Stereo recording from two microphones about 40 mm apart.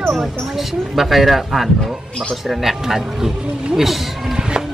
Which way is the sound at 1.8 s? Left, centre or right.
Centre.